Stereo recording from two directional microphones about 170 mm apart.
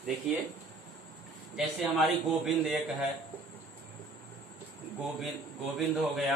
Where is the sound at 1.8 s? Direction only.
Centre (ahead or behind).